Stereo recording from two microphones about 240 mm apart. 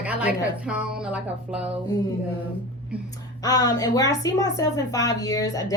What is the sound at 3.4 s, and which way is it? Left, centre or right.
A woman's voice, centre.